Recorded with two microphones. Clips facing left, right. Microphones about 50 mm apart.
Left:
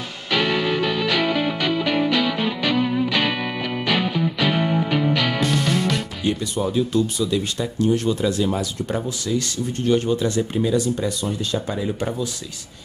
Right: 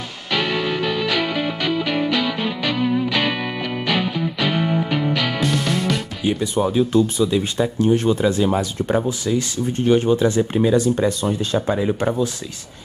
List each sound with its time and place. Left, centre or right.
0.3 s music: centre
6.2 s speech: right
6.6 s speech: right
9.2 s speech: right
10.5 s speech: right